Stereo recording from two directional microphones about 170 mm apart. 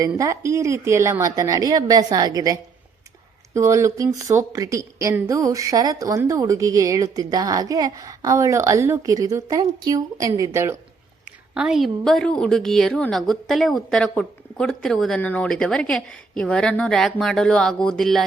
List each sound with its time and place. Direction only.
0.2 s a woman's voice: 20° right (ahead or behind)
11.5 s a woman's voice: 5° right (ahead or behind)